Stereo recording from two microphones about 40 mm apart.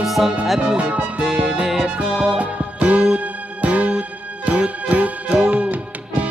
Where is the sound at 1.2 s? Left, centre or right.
Centre.